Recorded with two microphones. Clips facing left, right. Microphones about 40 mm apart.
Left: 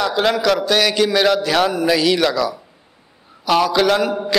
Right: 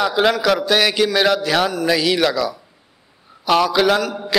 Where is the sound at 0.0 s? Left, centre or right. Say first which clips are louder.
Even; centre.